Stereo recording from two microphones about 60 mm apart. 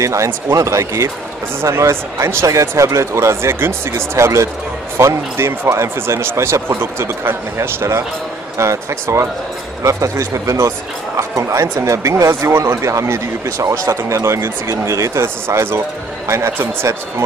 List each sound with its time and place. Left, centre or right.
0.0 s speech: right
15.5 s speech: right
16.3 s speech: right